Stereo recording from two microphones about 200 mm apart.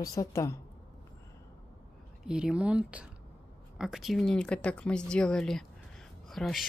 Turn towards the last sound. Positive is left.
turn(degrees=0)  # may be behind; listen again after turning